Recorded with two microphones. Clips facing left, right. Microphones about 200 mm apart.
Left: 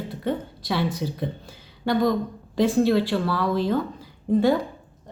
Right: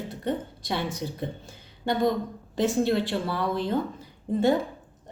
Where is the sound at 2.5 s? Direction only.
20° right (ahead or behind).